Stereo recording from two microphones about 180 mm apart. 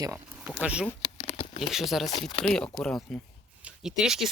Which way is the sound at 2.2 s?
25° left (ahead or behind).